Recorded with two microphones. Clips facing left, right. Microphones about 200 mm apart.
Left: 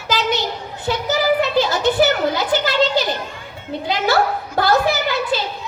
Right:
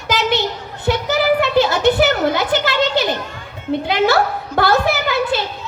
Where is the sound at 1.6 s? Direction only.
60° right (ahead or behind).